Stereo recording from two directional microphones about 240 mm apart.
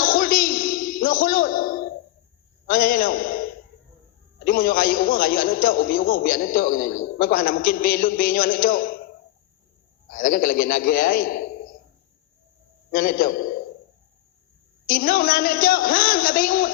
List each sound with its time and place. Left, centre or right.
0.0 s a sound: left
2.6 s a man's voice: left
10.1 s a man's voice: left
12.9 s a man's voice: left
14.8 s a man's voice: left